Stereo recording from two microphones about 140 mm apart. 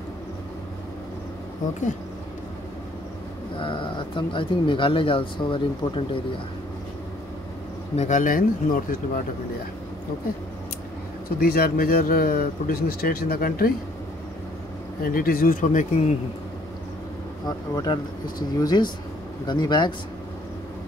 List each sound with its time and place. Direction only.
3.5 s speech: 35° left (ahead or behind)
7.9 s speech: 55° left (ahead or behind); by 9.2 s 80° left
11.3 s speech: 90° left
15.0 s speech: 90° left; by 16.0 s 65° left (ahead or behind)
17.5 s speech: 30° left (ahead or behind)